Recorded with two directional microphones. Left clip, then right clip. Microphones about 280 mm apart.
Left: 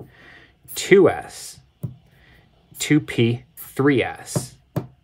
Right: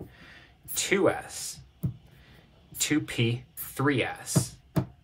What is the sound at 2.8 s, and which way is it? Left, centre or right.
Speech, left.